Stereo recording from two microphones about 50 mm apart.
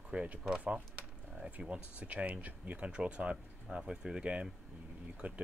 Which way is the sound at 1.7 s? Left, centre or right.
Right.